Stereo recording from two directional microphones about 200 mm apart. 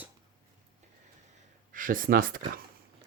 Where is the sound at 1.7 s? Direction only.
45° right (ahead or behind).